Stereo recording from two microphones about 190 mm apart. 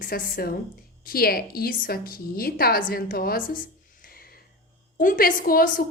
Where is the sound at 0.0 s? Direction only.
50° left (ahead or behind).